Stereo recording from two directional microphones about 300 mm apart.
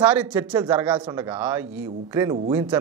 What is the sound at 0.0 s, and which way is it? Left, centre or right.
Speech, centre.